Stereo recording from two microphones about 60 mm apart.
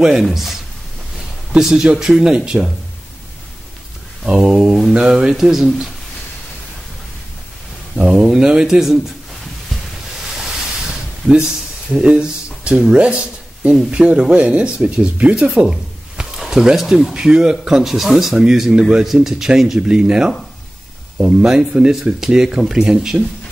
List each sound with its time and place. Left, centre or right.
0.0 s speech: centre
1.6 s speech: centre
4.3 s speech: centre
7.9 s a sound: centre
11.2 s speech: centre
15.5 s speech: centre
21.4 s speech: centre